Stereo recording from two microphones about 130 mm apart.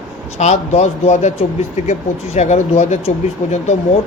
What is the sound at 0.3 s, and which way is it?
Speech, 60° left (ahead or behind).